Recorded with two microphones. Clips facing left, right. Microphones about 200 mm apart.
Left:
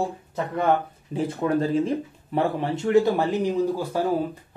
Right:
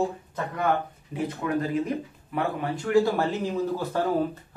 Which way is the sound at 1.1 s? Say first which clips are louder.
Left 4 dB; 30° left (ahead or behind).